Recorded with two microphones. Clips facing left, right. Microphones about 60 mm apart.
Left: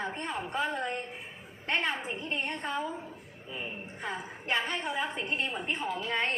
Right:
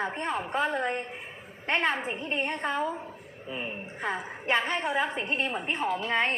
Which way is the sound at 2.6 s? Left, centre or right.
Right.